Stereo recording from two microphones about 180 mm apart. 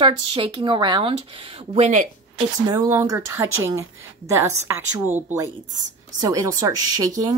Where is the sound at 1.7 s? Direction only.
40° right (ahead or behind).